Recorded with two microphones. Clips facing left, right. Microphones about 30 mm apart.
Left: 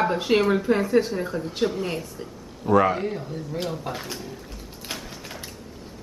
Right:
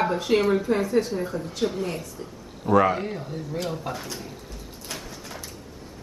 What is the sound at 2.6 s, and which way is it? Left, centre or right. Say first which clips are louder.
Speech: even; centre.